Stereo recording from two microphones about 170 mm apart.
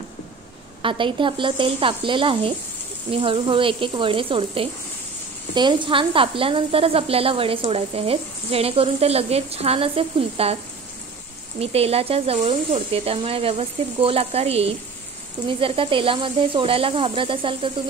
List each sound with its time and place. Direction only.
0.8 s a woman's voice: 30° right (ahead or behind)
11.6 s a woman's voice: 35° right (ahead or behind)